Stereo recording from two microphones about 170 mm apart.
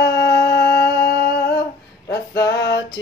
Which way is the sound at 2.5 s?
75° left (ahead or behind).